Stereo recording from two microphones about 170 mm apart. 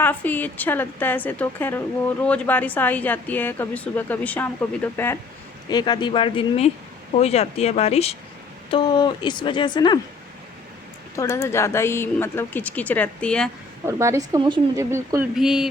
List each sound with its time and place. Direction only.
0.0 s a woman's voice: 10° left (ahead or behind)
5.6 s speech: 25° left (ahead or behind)
8.7 s speech: 25° left (ahead or behind)
11.2 s a woman's voice: 15° left (ahead or behind)
13.8 s speech: 15° right (ahead or behind)
15.4 s speech: 5° right (ahead or behind)